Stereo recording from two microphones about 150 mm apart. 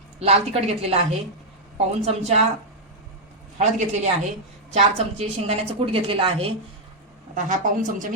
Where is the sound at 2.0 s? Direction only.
45° right (ahead or behind).